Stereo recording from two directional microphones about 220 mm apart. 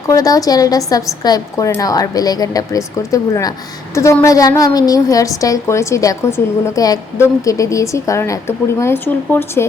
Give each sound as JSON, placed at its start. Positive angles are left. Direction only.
{"t": 0.1, "sound": "a woman's voice", "side_deg": 15}